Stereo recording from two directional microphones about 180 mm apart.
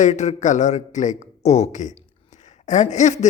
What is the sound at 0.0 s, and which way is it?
A man's voice, 40° left (ahead or behind).